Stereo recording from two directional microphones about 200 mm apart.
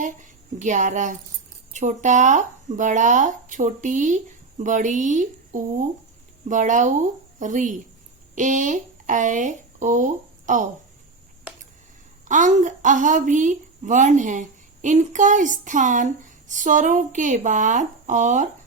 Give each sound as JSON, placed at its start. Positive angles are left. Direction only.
{"t": 0.0, "sound": "a woman's voice", "side_deg": -40}
{"t": 12.3, "sound": "a woman's voice", "side_deg": -40}